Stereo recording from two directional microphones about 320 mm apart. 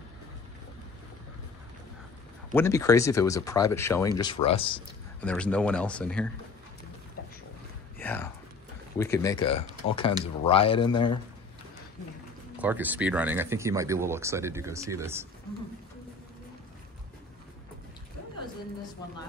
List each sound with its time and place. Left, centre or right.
2.5 s speech: centre
5.2 s speech: centre
8.0 s speech: centre
12.5 s speech: centre